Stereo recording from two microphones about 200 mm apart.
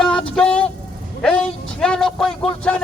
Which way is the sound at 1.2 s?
5° left (ahead or behind).